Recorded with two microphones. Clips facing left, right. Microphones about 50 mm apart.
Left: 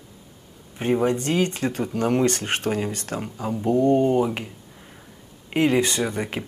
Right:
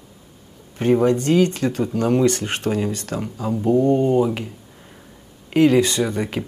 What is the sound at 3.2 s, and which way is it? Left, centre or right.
Speech, left.